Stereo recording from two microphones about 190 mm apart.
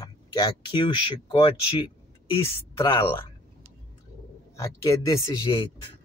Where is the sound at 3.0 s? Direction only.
30° left (ahead or behind).